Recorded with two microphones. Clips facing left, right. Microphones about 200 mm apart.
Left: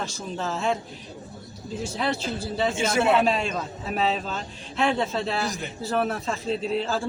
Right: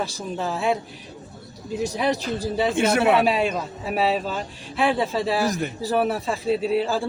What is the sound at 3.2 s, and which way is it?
A man's voice, 10° right (ahead or behind).